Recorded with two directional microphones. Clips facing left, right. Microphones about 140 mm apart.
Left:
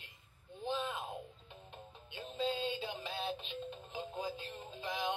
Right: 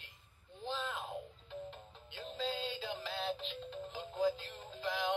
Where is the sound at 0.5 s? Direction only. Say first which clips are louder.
Left 2 dB; 15° left (ahead or behind).